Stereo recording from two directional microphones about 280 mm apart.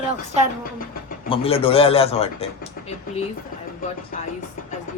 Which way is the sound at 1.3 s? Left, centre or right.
Left.